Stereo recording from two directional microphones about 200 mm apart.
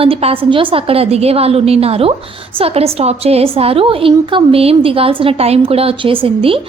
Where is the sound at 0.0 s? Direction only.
30° right (ahead or behind).